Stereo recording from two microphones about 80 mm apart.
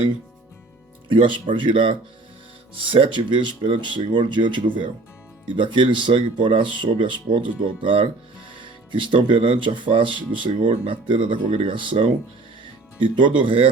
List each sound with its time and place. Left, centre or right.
1.0 s speech: right